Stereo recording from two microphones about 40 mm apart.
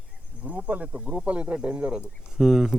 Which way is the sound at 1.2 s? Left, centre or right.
Right.